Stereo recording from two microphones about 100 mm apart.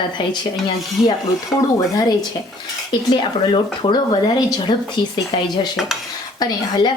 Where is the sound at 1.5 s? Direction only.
10° left (ahead or behind).